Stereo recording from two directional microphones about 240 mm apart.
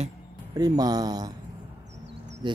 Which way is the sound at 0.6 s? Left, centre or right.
Centre.